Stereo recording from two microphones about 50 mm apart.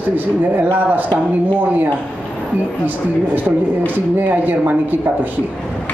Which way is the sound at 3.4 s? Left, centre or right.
Right.